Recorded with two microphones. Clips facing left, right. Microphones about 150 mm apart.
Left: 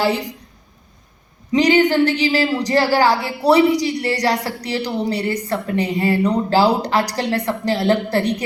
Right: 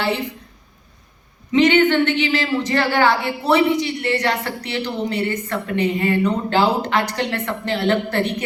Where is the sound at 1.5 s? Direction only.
35° left (ahead or behind).